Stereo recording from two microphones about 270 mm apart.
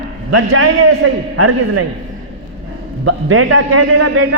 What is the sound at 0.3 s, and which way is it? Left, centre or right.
A man's voice, right.